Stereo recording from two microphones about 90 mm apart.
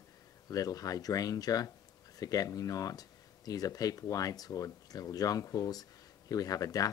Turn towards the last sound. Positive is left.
turn(degrees=40)  # may be behind; listen again after turning